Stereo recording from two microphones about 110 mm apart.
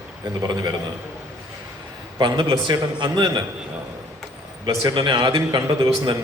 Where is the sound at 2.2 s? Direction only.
45° right (ahead or behind).